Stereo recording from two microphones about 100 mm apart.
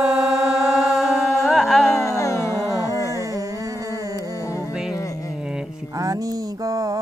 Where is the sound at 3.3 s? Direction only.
35° right (ahead or behind).